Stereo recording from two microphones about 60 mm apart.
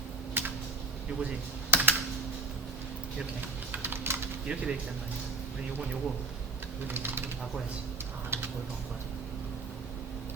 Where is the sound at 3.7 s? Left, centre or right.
Right.